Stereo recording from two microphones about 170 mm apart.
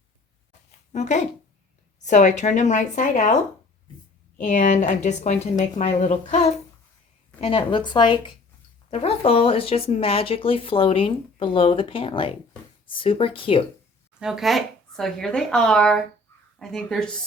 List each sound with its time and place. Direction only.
0.9 s a woman's voice: 45° left (ahead or behind)
4.4 s a woman's voice: 45° left (ahead or behind)
7.4 s a woman's voice: 30° left (ahead or behind)
14.2 s speech: 5° right (ahead or behind)